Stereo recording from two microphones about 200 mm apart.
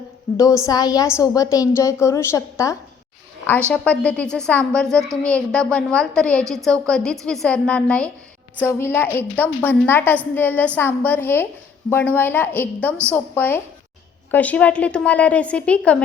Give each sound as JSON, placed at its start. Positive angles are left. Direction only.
{"t": 0.3, "sound": "a woman's voice", "side_deg": 15}